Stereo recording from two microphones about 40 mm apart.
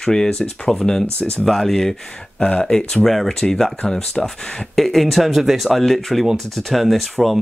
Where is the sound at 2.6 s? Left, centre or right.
Centre.